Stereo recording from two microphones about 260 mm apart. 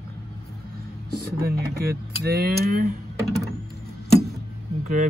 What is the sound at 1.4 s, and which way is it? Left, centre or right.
Speech, right.